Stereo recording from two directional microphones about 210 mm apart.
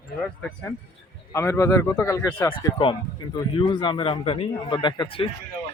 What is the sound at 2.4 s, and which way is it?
Speech, 25° left (ahead or behind).